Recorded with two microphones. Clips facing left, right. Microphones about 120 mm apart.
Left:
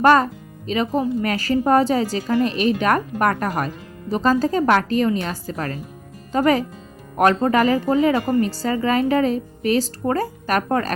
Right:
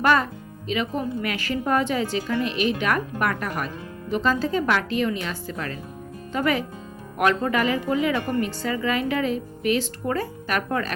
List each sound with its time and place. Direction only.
0.0 s a woman's voice: 40° left (ahead or behind)